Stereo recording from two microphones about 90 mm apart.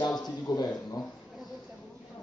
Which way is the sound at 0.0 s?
50° left (ahead or behind).